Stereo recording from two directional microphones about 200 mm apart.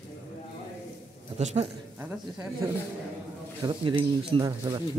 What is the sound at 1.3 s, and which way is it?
Speech, 35° right (ahead or behind).